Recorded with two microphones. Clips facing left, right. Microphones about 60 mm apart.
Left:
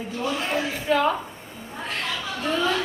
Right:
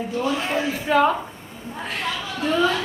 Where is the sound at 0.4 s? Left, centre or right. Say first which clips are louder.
Right 2 dB; centre.